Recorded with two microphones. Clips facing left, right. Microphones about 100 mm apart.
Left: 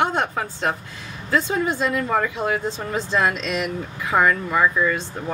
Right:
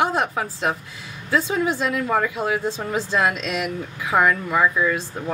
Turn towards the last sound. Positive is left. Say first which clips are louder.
# even
turn(degrees=-5)  # may be behind; listen again after turning